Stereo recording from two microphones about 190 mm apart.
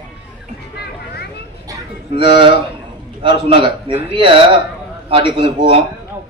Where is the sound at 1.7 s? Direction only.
25° right (ahead or behind).